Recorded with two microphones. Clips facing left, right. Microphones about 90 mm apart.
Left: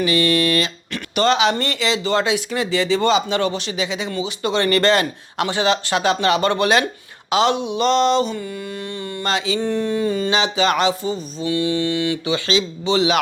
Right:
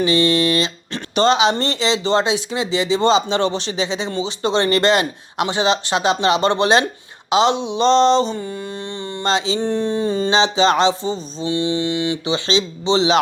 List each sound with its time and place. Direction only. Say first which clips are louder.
0.0 s speech: right 2 dB; 25° right (ahead or behind)